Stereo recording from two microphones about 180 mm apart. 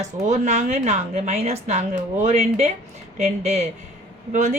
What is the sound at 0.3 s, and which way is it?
A woman's voice, 40° right (ahead or behind).